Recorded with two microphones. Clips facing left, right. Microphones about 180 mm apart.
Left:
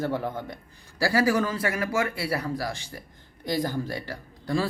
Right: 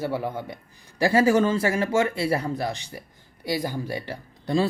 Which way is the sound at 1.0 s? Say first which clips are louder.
Right 4 dB; 25° right (ahead or behind).